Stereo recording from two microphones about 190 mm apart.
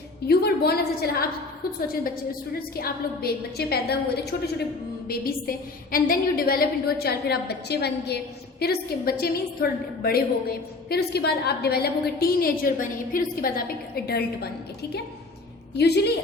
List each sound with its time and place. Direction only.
0.3 s a woman's voice: 55° left (ahead or behind)
2.6 s a woman's voice: 55° left (ahead or behind)
15.8 s a woman's voice: 60° left (ahead or behind)